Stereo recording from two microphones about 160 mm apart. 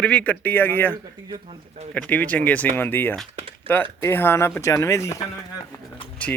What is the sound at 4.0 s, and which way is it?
Speech, 15° left (ahead or behind).